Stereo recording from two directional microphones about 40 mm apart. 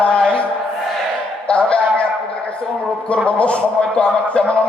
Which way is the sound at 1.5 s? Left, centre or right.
Left.